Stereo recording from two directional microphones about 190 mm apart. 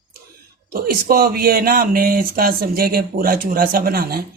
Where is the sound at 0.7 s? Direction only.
50° right (ahead or behind).